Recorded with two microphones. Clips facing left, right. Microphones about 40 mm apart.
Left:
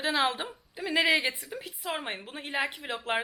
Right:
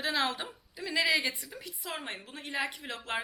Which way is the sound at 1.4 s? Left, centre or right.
Centre.